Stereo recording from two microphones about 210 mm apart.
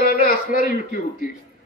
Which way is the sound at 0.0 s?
40° left (ahead or behind).